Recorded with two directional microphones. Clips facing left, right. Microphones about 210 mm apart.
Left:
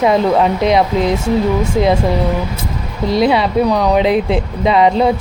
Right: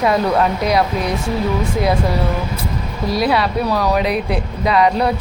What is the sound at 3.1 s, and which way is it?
A woman's voice, 25° left (ahead or behind).